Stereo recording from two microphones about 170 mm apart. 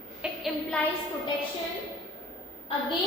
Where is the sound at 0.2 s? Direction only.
Centre (ahead or behind).